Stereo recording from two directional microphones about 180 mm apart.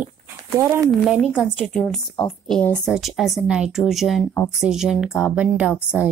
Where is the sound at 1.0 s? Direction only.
Centre (ahead or behind).